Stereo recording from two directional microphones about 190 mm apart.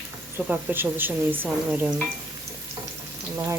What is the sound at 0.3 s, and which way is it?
Speech, 10° right (ahead or behind).